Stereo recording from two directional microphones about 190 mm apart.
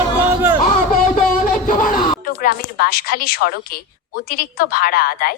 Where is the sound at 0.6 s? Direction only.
45° left (ahead or behind).